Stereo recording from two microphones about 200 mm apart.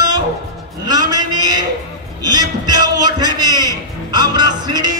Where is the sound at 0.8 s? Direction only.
20° right (ahead or behind).